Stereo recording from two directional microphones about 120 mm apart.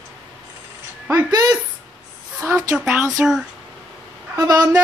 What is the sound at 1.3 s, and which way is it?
Speech, 30° right (ahead or behind).